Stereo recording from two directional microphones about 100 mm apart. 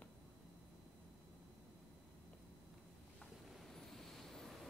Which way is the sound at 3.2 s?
5° left (ahead or behind).